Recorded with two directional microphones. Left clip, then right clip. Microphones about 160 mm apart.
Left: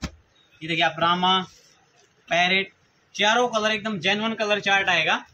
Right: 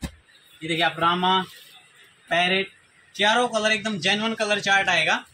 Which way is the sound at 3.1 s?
Centre (ahead or behind).